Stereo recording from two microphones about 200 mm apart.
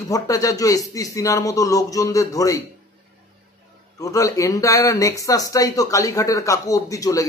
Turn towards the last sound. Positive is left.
turn(degrees=15)  # may be behind; listen again after turning